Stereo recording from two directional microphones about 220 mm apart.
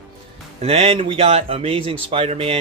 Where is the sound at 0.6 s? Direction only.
25° right (ahead or behind).